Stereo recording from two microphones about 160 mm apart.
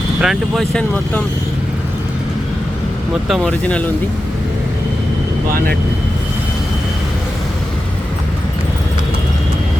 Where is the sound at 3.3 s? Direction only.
5° left (ahead or behind).